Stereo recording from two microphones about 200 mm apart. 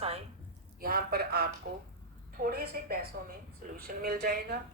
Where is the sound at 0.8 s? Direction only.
50° right (ahead or behind).